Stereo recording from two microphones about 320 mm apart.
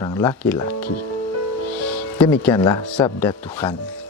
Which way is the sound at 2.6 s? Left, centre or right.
Centre.